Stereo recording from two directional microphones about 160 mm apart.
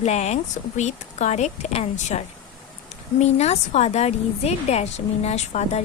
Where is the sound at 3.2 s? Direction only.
45° left (ahead or behind).